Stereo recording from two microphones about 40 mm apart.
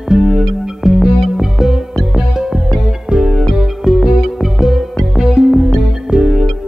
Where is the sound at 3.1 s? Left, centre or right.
Right.